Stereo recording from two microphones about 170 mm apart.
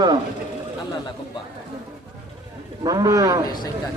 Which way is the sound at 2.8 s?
20° right (ahead or behind).